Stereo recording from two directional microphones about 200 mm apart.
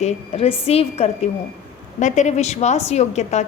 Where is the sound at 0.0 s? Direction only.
30° left (ahead or behind).